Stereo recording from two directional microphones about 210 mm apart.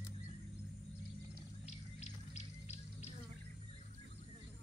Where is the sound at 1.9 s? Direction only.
30° left (ahead or behind).